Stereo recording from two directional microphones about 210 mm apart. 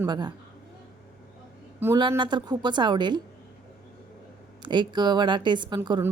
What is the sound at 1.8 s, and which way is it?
A woman's voice, 15° right (ahead or behind).